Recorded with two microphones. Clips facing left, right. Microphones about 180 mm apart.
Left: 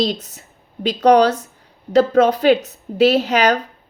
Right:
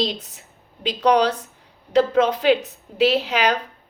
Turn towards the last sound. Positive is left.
turn(degrees=45)  # may be behind; listen again after turning